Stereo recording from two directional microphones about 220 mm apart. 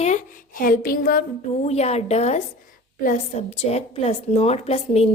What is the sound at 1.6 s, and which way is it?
A woman's voice, 30° left (ahead or behind).